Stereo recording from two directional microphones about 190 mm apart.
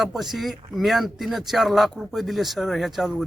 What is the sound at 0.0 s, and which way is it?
Speech, centre (ahead or behind).